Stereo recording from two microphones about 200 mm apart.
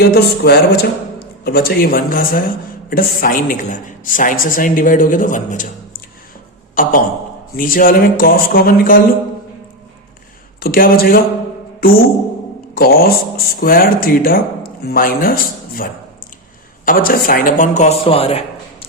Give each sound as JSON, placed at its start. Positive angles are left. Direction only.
{"t": 0.0, "sound": "a woman's voice", "side_deg": 55}
{"t": 10.6, "sound": "speech", "side_deg": 45}
{"t": 11.8, "sound": "music", "side_deg": 45}
{"t": 12.7, "sound": "speech", "side_deg": 50}